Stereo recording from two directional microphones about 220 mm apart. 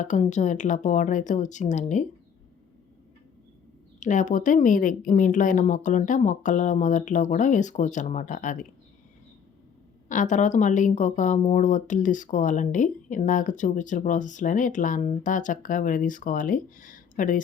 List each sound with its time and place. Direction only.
0.0 s speech: 35° left (ahead or behind)
4.0 s speech: 35° left (ahead or behind)
10.1 s speech: 35° left (ahead or behind)